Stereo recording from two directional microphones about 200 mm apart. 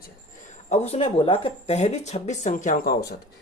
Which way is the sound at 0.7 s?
30° left (ahead or behind).